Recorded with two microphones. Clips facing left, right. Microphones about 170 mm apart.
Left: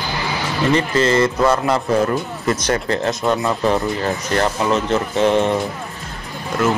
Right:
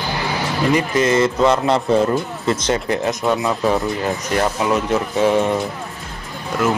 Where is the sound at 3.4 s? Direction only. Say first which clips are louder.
Even; 5° right (ahead or behind).